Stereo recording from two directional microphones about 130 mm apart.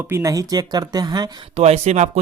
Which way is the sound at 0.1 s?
25° right (ahead or behind).